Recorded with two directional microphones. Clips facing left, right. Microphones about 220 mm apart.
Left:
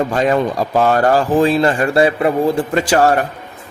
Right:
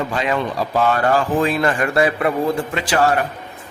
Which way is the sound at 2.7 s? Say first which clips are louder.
Left 5 dB; 45° left (ahead or behind).